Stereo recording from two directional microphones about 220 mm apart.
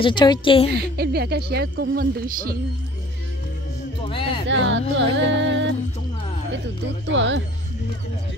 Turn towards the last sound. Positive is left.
turn(degrees=-55)  # may be behind; listen again after turning